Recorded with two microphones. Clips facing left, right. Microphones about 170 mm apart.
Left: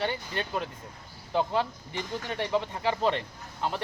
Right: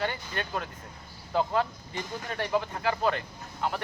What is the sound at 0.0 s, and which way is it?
Speech, 25° left (ahead or behind).